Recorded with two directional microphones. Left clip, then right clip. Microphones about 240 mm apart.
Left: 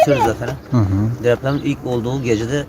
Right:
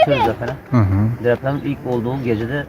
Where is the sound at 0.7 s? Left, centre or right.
Centre.